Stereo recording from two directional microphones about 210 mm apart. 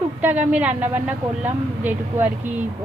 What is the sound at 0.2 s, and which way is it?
A woman's voice, 5° right (ahead or behind).